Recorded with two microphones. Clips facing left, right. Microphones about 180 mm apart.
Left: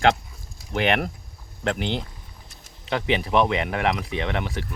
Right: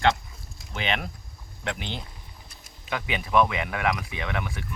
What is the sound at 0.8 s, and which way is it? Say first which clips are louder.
Speech: left 7 dB; 60° left (ahead or behind).